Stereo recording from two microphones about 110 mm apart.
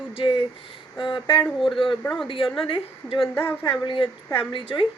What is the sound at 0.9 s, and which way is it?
Speech, 45° left (ahead or behind).